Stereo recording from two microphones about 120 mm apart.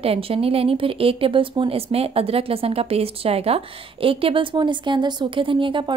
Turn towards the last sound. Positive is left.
turn(degrees=-45)  # may be behind; listen again after turning